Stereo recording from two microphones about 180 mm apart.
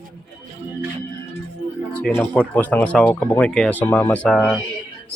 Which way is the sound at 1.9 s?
10° left (ahead or behind).